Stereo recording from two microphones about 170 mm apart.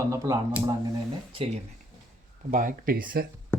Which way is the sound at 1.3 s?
35° right (ahead or behind).